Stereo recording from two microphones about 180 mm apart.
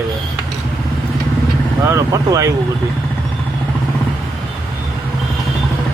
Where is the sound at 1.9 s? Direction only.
20° right (ahead or behind).